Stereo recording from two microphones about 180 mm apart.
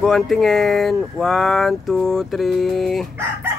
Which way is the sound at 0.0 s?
Centre (ahead or behind).